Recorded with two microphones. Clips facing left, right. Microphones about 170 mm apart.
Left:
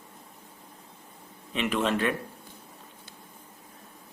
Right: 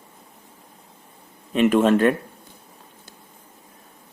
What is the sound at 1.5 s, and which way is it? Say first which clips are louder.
Speech: right 10 dB; 45° right (ahead or behind).